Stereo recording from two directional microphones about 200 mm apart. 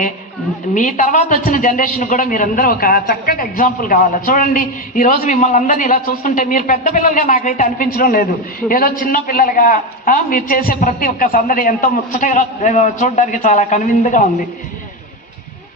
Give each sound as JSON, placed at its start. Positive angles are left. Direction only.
{"t": 0.7, "sound": "a man's voice", "side_deg": 40}